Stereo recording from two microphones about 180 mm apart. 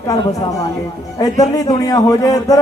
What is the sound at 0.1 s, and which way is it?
A man's voice, 20° left (ahead or behind).